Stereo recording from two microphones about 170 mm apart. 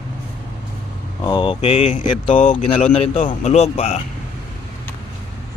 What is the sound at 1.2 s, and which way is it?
Speech, 30° left (ahead or behind).